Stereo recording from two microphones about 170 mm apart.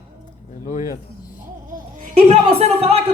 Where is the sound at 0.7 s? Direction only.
45° left (ahead or behind).